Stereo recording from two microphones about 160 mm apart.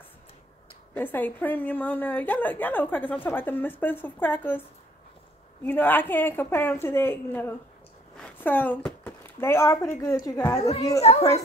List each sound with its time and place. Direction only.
0.9 s a woman's voice: 10° left (ahead or behind)
8.2 s a sound: 10° left (ahead or behind)
10.0 s a woman's voice: 20° left (ahead or behind)
11.0 s speech: 40° left (ahead or behind)